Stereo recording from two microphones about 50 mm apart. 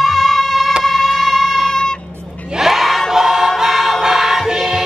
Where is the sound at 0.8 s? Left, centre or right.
Centre.